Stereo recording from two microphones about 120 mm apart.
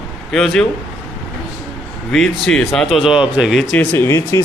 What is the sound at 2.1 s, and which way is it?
Speech, centre (ahead or behind).